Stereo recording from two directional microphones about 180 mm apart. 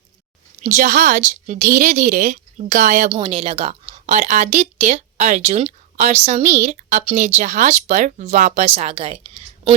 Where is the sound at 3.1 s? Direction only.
30° right (ahead or behind).